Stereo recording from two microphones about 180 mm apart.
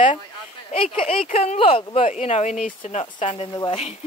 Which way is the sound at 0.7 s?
30° left (ahead or behind).